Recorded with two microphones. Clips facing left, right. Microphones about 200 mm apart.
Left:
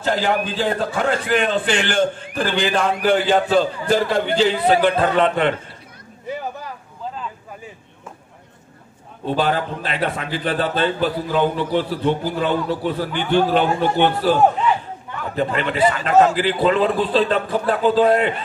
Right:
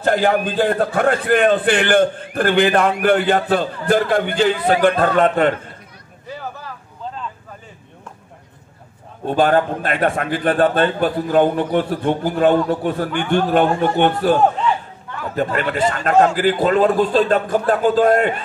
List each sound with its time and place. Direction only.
0.0 s a man's voice: 55° right (ahead or behind)
6.2 s a sound: 20° left (ahead or behind)
9.2 s a man's voice: 50° right (ahead or behind)
15.3 s a man's voice: 45° right (ahead or behind)